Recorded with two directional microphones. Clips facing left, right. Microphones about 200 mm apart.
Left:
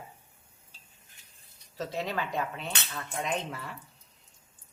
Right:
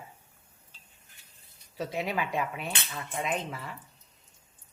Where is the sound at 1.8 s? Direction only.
10° right (ahead or behind).